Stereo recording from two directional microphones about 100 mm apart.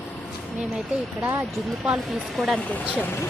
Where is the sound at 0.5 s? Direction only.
5° right (ahead or behind).